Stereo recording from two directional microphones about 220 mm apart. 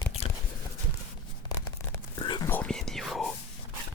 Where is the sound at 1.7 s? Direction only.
15° left (ahead or behind); by 3.3 s centre (ahead or behind).